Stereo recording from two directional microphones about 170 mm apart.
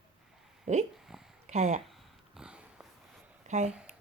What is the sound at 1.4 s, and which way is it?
Speech, 40° right (ahead or behind).